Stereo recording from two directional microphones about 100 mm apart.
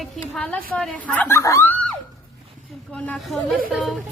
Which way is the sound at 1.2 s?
30° left (ahead or behind).